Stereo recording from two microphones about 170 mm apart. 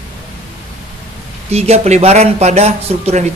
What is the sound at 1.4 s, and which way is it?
Speech, 40° right (ahead or behind).